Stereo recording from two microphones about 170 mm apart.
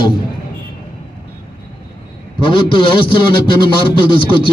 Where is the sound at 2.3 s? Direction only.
30° left (ahead or behind).